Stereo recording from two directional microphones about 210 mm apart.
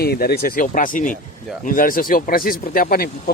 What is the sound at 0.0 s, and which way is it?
Speech, 50° left (ahead or behind).